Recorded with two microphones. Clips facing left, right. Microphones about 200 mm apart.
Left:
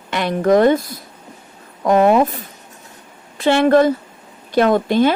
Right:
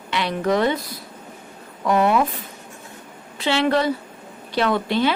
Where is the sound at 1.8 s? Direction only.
45° left (ahead or behind).